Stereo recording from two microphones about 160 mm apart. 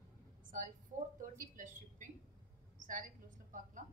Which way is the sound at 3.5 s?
55° right (ahead or behind).